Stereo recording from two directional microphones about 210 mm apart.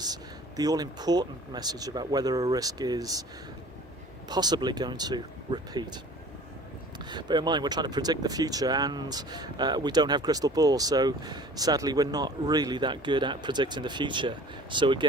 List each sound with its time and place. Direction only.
0.0 s speech: 20° right (ahead or behind)
4.3 s speech: 20° right (ahead or behind)
7.1 s speech: 20° right (ahead or behind)